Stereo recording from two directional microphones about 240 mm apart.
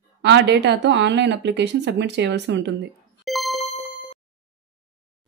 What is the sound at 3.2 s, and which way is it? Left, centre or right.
Music, centre.